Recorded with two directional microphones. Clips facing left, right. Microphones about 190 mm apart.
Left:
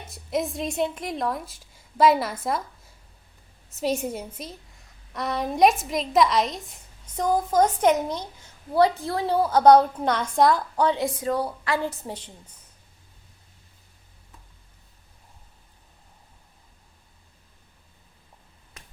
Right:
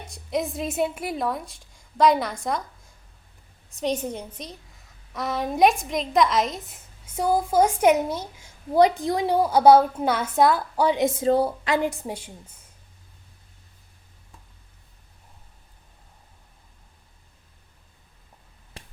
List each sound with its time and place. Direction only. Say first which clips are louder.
0.1 s a woman's voice: even; centre (ahead or behind)
8.7 s a woman's voice: right 2 dB; 15° right (ahead or behind)
11.0 s a woman's voice: right 5 dB; 25° right (ahead or behind); by 12.5 s 10° right (ahead or behind)
18.8 s a sound: right 6 dB; 30° right (ahead or behind)